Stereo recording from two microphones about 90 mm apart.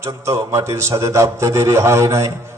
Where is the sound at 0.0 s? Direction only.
35° right (ahead or behind).